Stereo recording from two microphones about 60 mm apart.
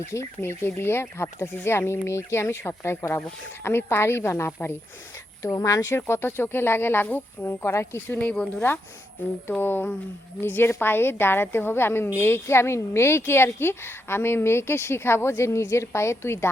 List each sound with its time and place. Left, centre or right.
0.0 s speech: left
5.4 s speech: left
5.9 s a woman's voice: left
7.6 s speech: left
8.2 s speech: left
9.5 s a woman's voice: left